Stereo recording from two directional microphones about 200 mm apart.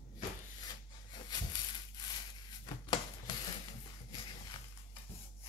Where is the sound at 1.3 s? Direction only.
20° left (ahead or behind).